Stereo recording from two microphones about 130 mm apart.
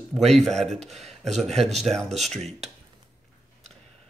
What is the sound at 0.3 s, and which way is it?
Speech, 5° left (ahead or behind).